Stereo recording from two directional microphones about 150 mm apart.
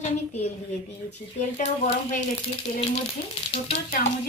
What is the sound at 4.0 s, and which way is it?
Speech, 75° left (ahead or behind).